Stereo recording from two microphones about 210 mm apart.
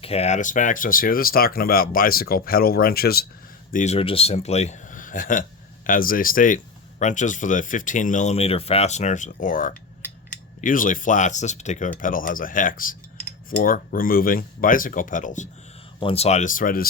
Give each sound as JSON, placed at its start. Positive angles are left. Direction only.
{"t": 0.0, "sound": "speech", "side_deg": 30}
{"t": 3.7, "sound": "a man's voice", "side_deg": 35}